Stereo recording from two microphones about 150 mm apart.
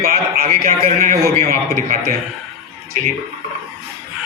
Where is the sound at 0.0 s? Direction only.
80° right.